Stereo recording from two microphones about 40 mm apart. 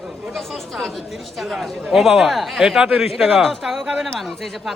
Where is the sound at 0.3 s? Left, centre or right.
Centre.